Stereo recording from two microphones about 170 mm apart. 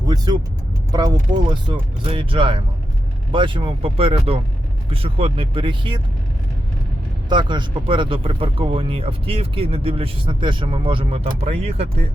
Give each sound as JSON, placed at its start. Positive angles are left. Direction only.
{"t": 0.0, "sound": "vehicle", "side_deg": -25}
{"t": 0.9, "sound": "speech", "side_deg": -25}
{"t": 7.3, "sound": "speech", "side_deg": -25}